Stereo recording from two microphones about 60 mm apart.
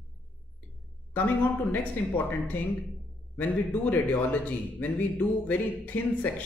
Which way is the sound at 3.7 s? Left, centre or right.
Left.